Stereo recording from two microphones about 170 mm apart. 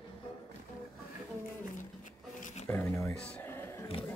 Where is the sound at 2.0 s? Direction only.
45° left (ahead or behind).